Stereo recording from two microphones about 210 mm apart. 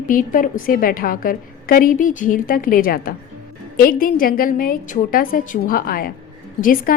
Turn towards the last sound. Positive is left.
turn(degrees=40)  # may be behind; listen again after turning